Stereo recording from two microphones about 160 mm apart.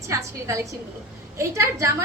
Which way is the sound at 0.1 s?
20° right (ahead or behind).